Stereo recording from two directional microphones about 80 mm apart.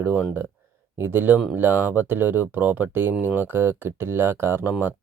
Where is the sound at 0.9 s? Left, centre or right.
Right.